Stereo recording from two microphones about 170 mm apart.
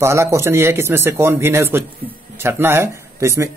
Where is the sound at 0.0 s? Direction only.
15° right (ahead or behind).